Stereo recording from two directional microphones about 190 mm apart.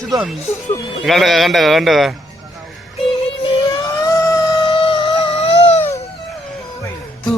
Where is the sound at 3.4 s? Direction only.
20° left (ahead or behind).